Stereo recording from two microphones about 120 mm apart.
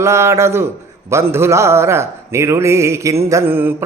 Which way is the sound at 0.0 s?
25° right (ahead or behind).